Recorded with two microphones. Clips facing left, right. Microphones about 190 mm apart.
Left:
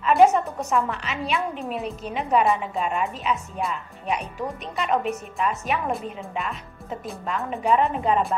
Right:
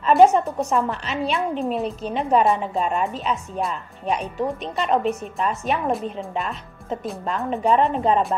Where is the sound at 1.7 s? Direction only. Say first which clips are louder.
Right 4 dB; 35° right (ahead or behind).